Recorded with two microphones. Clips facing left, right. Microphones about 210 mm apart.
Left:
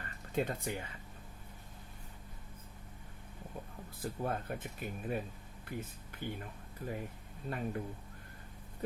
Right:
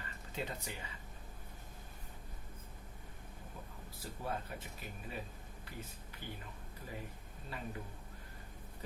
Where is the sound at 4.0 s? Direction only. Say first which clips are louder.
Left 5 dB; 55° left (ahead or behind).